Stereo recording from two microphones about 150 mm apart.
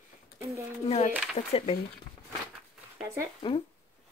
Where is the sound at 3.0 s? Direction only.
20° right (ahead or behind).